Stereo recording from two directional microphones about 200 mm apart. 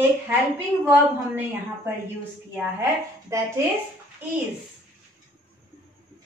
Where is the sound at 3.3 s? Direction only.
15° right (ahead or behind).